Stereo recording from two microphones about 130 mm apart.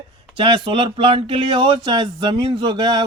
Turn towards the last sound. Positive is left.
turn(degrees=-35)  # may be behind; listen again after turning